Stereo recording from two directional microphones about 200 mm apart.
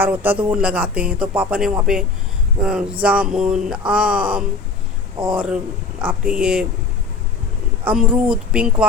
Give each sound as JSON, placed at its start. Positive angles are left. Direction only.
{"t": 0.0, "sound": "speech", "side_deg": -10}
{"t": 5.2, "sound": "speech", "side_deg": -20}
{"t": 6.0, "sound": "speech", "side_deg": -5}
{"t": 7.9, "sound": "speech", "side_deg": -5}